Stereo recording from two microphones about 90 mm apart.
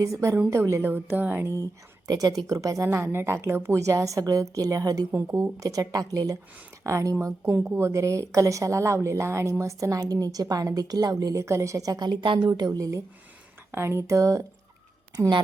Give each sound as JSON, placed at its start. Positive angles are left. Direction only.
{"t": 0.0, "sound": "a woman's voice", "side_deg": -40}
{"t": 2.0, "sound": "a woman's voice", "side_deg": -45}
{"t": 13.7, "sound": "a woman's voice", "side_deg": -25}